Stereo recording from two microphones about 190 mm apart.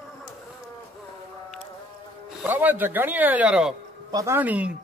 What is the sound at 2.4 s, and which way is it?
Speech, 10° right (ahead or behind).